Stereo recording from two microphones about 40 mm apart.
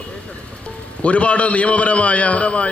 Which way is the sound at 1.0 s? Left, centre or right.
Left.